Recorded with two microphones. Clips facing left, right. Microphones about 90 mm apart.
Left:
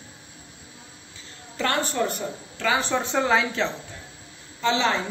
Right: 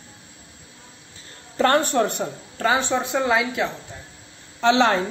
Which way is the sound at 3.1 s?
10° right (ahead or behind).